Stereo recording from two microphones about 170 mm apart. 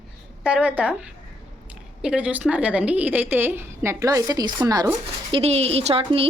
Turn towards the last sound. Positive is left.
turn(degrees=-35)  # may be behind; listen again after turning